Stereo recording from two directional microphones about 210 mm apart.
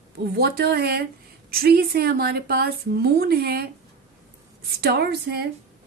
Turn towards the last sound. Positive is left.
turn(degrees=-50)  # may be behind; listen again after turning